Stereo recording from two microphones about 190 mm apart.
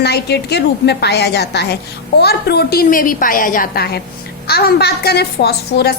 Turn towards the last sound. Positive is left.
turn(degrees=55)  # may be behind; listen again after turning